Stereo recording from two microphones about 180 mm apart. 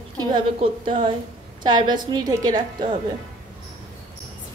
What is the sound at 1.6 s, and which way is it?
A woman's voice, 25° right (ahead or behind).